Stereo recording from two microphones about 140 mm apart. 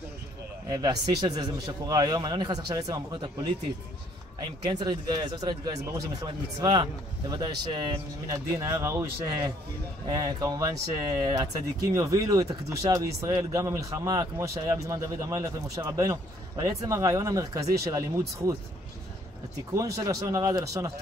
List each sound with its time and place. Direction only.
0.7 s speech: 30° right (ahead or behind)
4.4 s speech: 30° right (ahead or behind)
19.7 s speech: 25° right (ahead or behind)